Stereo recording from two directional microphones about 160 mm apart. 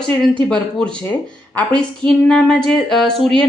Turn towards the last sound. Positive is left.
turn(degrees=5)  # may be behind; listen again after turning